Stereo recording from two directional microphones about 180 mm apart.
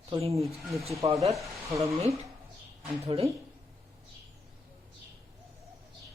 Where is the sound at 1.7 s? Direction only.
15° right (ahead or behind).